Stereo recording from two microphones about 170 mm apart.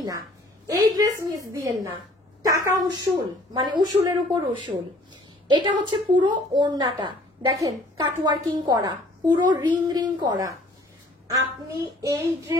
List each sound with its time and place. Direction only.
0.7 s a woman's voice: 20° right (ahead or behind)